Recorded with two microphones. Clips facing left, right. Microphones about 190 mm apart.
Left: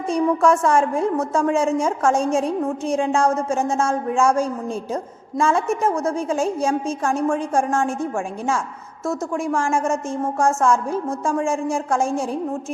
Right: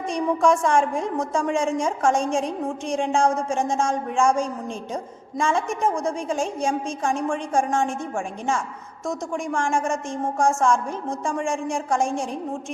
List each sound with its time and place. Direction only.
0.1 s a woman's voice: 5° left (ahead or behind)
9.0 s a woman's voice: 5° left (ahead or behind)